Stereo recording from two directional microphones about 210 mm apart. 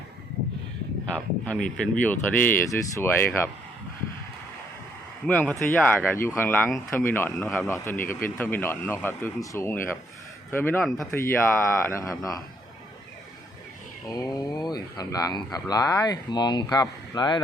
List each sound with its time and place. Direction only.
1.1 s speech: 5° left (ahead or behind)
5.2 s speech: 5° left (ahead or behind)
7.7 s speech: 10° left (ahead or behind)
11.3 s speech: 10° left (ahead or behind)
14.1 s speech: 20° left (ahead or behind)